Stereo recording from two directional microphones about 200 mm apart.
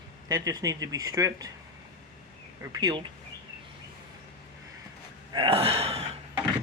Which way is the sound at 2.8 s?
20° right (ahead or behind).